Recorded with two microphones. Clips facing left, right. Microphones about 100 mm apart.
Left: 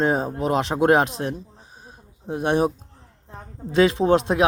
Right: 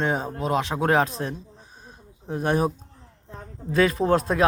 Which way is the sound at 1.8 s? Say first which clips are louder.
Left 3 dB; 15° left (ahead or behind).